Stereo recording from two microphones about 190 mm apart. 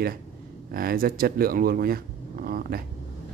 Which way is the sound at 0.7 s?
50° right (ahead or behind).